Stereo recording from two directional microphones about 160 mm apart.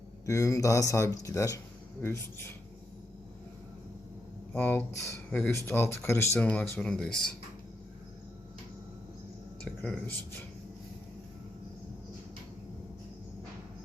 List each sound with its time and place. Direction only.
0.3 s speech: 20° left (ahead or behind)
4.5 s speech: 10° left (ahead or behind)
9.6 s speech: 5° left (ahead or behind)